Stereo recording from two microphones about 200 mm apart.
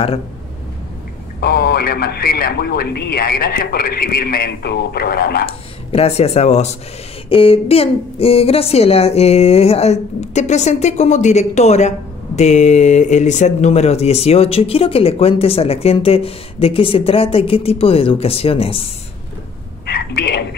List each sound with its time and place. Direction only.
1.4 s speech: 50° left (ahead or behind)
5.5 s a woman's voice: 30° left (ahead or behind)
19.9 s speech: 50° left (ahead or behind)